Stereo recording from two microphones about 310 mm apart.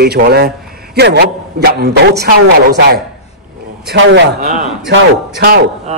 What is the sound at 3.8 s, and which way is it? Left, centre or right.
A man's voice, right.